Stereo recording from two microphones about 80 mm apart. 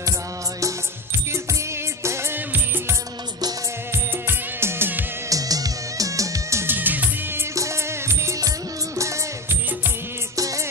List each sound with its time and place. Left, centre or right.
2.0 s music: right
4.3 s music: right
5.3 s music: right
6.6 s music: right
7.5 s music: right
10.3 s music: right